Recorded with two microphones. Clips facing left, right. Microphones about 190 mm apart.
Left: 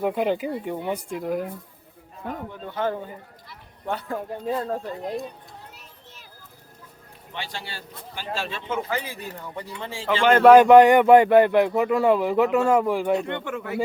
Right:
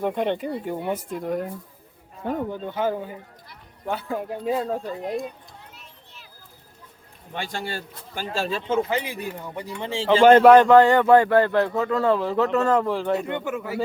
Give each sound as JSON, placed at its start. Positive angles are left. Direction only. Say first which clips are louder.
{"t": 0.0, "sound": "speech", "louder": "left 1 dB", "side_deg": 5}
{"t": 2.6, "sound": "speech", "louder": "left 2 dB", "side_deg": -10}
{"t": 7.3, "sound": "a man's voice", "louder": "right 5 dB", "side_deg": -50}
{"t": 8.9, "sound": "speech", "louder": "right 3 dB", "side_deg": -20}
{"t": 10.1, "sound": "speech", "louder": "right 6 dB", "side_deg": -40}
{"t": 10.4, "sound": "a man's voice", "louder": "left 1 dB", "side_deg": 5}
{"t": 13.1, "sound": "speech", "louder": "right 1 dB", "side_deg": -5}